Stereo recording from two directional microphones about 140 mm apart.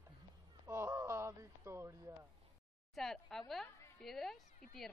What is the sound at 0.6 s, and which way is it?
Speech, 20° right (ahead or behind).